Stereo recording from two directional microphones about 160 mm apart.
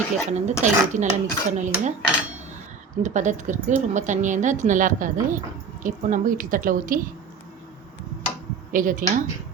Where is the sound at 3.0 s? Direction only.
50° right (ahead or behind).